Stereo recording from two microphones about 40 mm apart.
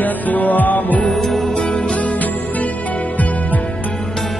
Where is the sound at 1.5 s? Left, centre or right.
Left.